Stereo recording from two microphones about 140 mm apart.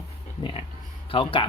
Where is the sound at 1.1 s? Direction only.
40° left (ahead or behind).